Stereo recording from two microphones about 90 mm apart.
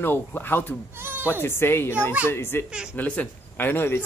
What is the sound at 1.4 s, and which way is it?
Speech, 25° left (ahead or behind).